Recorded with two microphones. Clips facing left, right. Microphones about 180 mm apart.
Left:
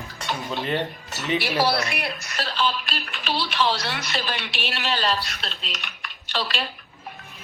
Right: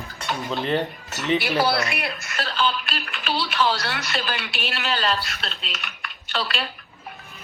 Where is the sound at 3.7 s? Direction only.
20° left (ahead or behind).